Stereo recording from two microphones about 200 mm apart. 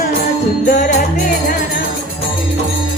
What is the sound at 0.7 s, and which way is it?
Jingle bell, 40° left (ahead or behind).